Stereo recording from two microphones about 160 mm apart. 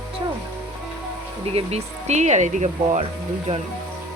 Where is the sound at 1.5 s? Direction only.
45° right (ahead or behind).